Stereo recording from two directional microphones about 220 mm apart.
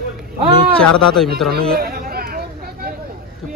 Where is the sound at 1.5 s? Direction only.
45° right (ahead or behind).